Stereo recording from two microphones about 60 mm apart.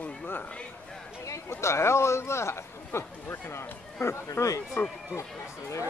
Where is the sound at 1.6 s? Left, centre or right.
Left.